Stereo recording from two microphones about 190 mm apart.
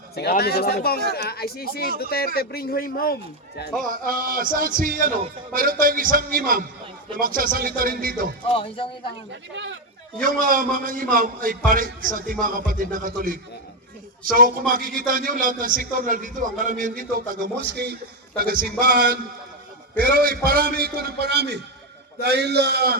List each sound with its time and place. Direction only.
0.2 s speech: 55° left (ahead or behind)
3.8 s a man's voice: 45° right (ahead or behind)
8.5 s speech: 30° left (ahead or behind)
10.2 s a man's voice: 45° right (ahead or behind)
14.7 s a man's voice: 50° right (ahead or behind)
17.6 s a man's voice: 60° right (ahead or behind)